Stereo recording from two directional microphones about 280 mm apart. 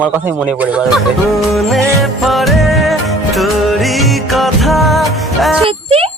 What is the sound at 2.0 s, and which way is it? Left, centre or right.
Music, centre.